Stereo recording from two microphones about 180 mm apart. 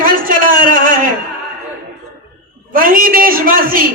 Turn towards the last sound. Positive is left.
turn(degrees=-50)  # may be behind; listen again after turning